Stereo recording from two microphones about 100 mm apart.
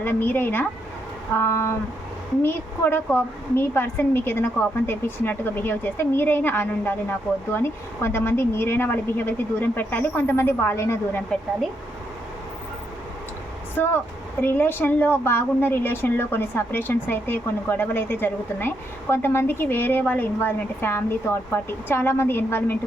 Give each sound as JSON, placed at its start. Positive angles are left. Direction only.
{"t": 0.0, "sound": "a woman's voice", "side_deg": 20}
{"t": 13.8, "sound": "a woman's voice", "side_deg": 15}